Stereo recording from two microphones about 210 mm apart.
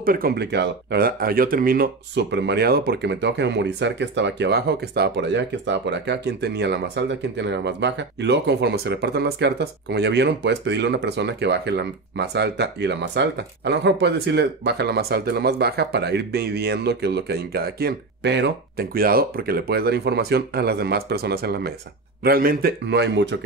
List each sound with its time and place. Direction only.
0.0 s speech: 45° right (ahead or behind)